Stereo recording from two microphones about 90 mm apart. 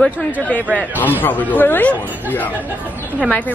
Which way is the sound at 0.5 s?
20° left (ahead or behind).